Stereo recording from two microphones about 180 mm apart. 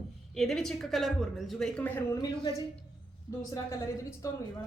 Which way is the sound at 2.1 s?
20° left (ahead or behind).